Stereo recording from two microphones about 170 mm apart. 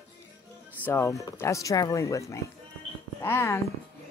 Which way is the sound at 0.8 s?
15° left (ahead or behind).